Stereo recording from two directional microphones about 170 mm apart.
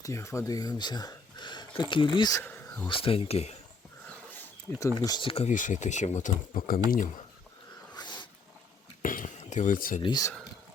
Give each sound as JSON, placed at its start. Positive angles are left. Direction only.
{"t": 0.0, "sound": "speech", "side_deg": 15}
{"t": 2.4, "sound": "speech", "side_deg": 10}
{"t": 2.9, "sound": "speech", "side_deg": 30}
{"t": 4.9, "sound": "speech", "side_deg": 25}
{"t": 5.5, "sound": "speech", "side_deg": 45}
{"t": 7.9, "sound": "dog", "side_deg": 25}
{"t": 9.0, "sound": "a sound", "side_deg": 50}
{"t": 10.0, "sound": "speech", "side_deg": 25}